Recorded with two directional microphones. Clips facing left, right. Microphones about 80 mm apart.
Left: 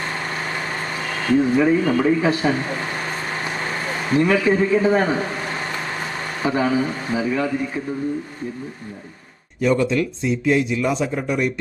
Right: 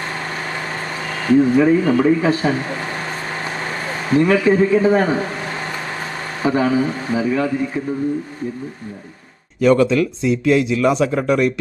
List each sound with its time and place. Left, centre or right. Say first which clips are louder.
1.3 s speech: right 4 dB; centre
4.1 s speech: right 3 dB; centre
6.4 s speech: right 3 dB; centre
9.6 s a man's voice: right 5 dB; right